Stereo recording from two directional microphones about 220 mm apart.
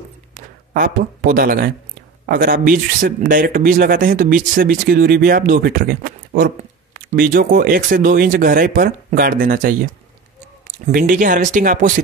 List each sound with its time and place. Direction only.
0.3 s a sound: 40° right (ahead or behind)
2.2 s speech: 40° right (ahead or behind)
10.9 s speech: 40° right (ahead or behind)